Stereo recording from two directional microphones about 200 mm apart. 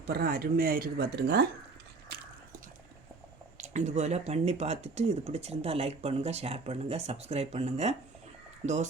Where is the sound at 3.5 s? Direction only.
35° right (ahead or behind).